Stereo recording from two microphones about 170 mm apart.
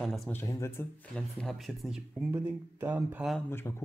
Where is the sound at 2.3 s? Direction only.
10° right (ahead or behind).